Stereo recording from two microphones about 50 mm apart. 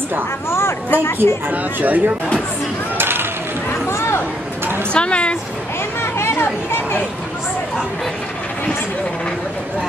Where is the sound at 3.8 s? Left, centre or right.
Left.